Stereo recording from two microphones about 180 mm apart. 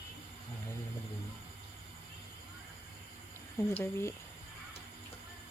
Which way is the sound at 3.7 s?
10° left (ahead or behind).